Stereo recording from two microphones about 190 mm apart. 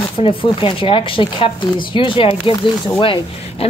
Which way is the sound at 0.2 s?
30° left (ahead or behind).